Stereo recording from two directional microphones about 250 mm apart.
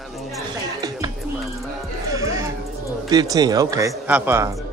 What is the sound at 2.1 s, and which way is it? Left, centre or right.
Music, centre.